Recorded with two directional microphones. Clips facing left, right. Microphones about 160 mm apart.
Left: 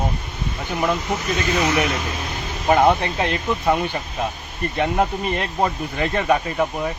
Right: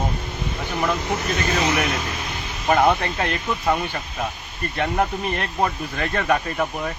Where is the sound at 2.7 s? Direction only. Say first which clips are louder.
Left 2 dB; 15° left (ahead or behind).